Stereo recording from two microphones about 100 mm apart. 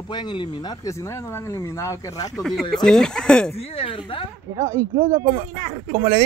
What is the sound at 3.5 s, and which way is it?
Speech, 80° left.